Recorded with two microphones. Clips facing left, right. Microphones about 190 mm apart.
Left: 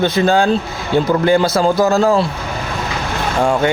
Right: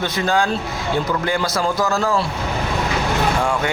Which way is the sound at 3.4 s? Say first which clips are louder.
Left 6 dB; 35° left (ahead or behind).